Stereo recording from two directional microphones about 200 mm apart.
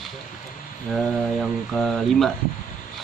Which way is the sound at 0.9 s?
Centre (ahead or behind).